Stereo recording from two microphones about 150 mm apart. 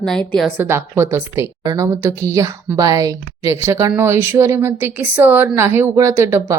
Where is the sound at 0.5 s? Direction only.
15° right (ahead or behind).